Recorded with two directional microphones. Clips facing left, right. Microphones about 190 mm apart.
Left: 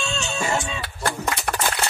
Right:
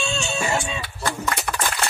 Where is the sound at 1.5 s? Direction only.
55° left (ahead or behind).